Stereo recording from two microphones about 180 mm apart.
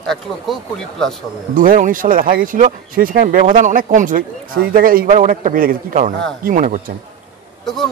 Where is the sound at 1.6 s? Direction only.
45° right (ahead or behind).